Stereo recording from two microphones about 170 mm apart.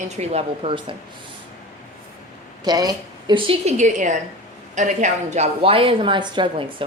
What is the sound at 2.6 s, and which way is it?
A woman's voice, 25° right (ahead or behind).